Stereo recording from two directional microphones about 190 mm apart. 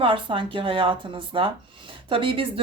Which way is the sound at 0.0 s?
25° right (ahead or behind).